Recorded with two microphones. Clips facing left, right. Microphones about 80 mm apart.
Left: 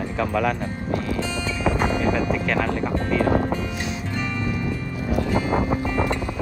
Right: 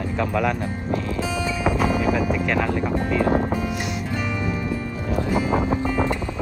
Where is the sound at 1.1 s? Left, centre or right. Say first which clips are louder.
Right 2 dB; centre.